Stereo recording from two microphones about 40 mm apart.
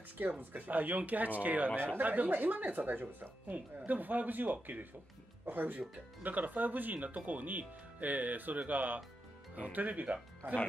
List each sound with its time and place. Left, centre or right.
0.4 s speech: right
10.4 s speech: right